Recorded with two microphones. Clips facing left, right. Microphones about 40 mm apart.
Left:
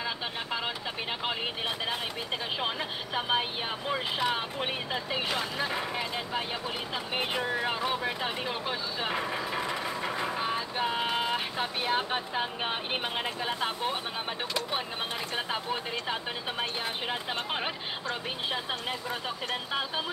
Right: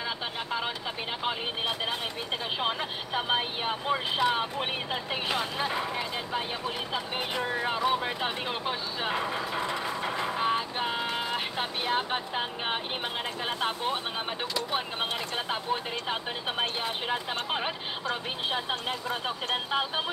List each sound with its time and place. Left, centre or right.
3.2 s speech: centre
4.6 s speech: centre
5.7 s speech: centre
7.4 s speech: centre
8.0 s speech: centre
9.1 s speech: centre
10.4 s vehicle: centre
11.0 s vehicle: centre
11.3 s speech: centre
18.5 s speech: centre